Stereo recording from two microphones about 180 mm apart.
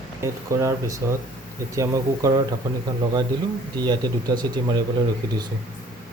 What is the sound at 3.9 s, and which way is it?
Speech, 25° right (ahead or behind).